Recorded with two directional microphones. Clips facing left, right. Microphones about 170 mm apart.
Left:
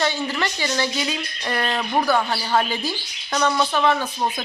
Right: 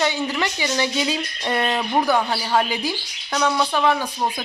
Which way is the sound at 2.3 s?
10° right (ahead or behind).